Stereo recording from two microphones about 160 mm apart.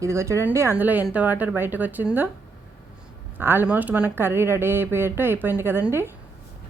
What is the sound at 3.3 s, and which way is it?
A woman's voice, 15° right (ahead or behind).